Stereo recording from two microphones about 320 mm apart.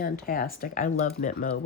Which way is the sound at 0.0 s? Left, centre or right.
Left.